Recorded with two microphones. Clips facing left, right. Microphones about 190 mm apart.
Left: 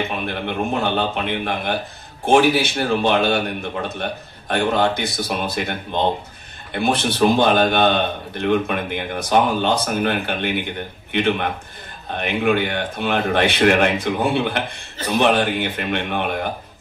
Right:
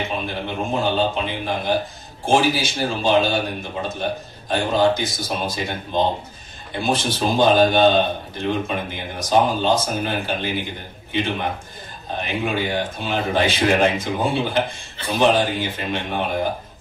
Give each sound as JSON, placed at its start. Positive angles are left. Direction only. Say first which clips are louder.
{"t": 0.3, "sound": "a man's voice", "louder": "left 2 dB", "side_deg": 60}